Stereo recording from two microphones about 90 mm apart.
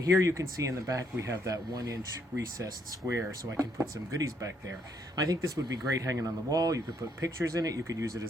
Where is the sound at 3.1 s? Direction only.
35° right (ahead or behind).